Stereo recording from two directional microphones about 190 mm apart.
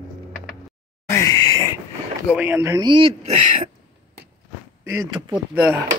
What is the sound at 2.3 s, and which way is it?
A man's voice, 10° right (ahead or behind).